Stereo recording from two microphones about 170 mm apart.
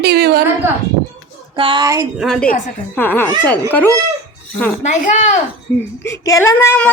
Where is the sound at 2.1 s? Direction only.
Centre (ahead or behind).